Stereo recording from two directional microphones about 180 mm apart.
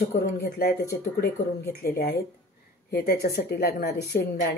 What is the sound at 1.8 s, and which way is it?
Speech, 60° left (ahead or behind).